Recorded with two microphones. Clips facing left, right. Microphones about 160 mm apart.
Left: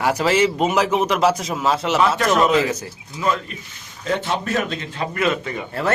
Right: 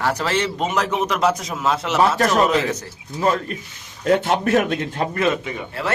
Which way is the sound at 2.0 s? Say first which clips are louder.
Right 2 dB; 40° right (ahead or behind).